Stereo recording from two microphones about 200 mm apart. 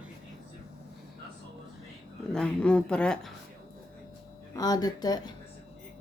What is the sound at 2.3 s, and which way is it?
Speech, 5° left (ahead or behind).